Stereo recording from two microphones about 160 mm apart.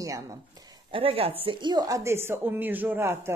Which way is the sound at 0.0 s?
20° right (ahead or behind).